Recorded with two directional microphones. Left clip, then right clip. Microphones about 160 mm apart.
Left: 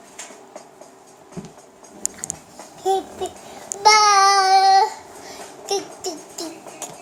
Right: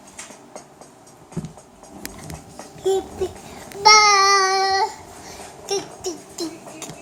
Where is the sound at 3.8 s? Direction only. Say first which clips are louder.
Right 1 dB; 10° left (ahead or behind).